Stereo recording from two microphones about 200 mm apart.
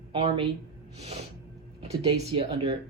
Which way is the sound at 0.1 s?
25° right (ahead or behind).